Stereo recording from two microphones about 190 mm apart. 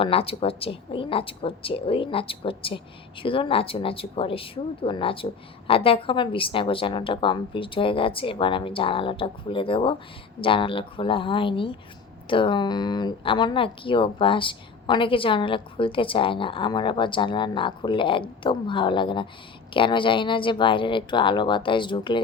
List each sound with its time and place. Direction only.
0.0 s speech: 30° left (ahead or behind)